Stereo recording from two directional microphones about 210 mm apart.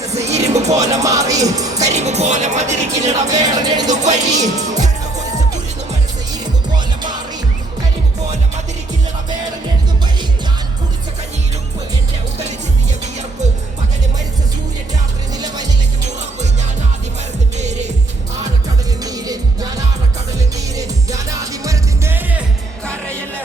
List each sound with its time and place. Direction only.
0.1 s music: 30° right (ahead or behind)
0.8 s music: 15° right (ahead or behind)
1.8 s music: 35° right (ahead or behind)
3.4 s music: 20° right (ahead or behind)
3.8 s music: 35° right (ahead or behind)
6.7 s music: 20° right (ahead or behind)
15.4 s music: 20° right (ahead or behind)
19.0 s music: 15° right (ahead or behind)